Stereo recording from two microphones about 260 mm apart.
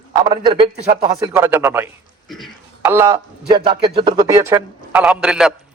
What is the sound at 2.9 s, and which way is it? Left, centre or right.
Speech, centre.